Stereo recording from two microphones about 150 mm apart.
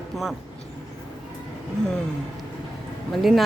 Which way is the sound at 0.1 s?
Centre (ahead or behind).